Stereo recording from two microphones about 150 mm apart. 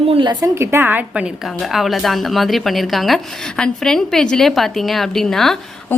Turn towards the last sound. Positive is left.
turn(degrees=0)  # may be behind; listen again after turning